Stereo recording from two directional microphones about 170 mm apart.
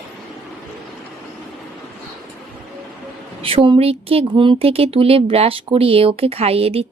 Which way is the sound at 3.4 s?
30° right (ahead or behind).